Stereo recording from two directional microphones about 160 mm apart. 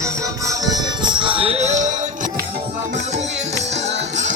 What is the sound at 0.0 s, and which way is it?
Music, 20° right (ahead or behind).